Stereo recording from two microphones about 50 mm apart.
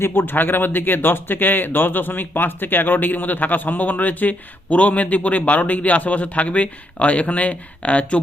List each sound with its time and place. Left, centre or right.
0.0 s speech: left